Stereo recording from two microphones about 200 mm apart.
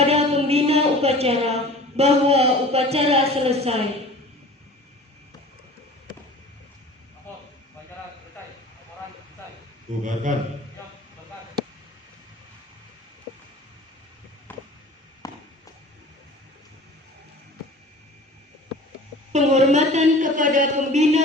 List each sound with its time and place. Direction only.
0.0 s a sound: 30° right (ahead or behind)
2.0 s a woman's voice: 30° right (ahead or behind)
9.9 s a woman's voice: 35° right (ahead or behind)
14.5 s a sound: 10° left (ahead or behind)
15.2 s walk: 15° left (ahead or behind)
19.3 s a woman's voice: 35° right (ahead or behind)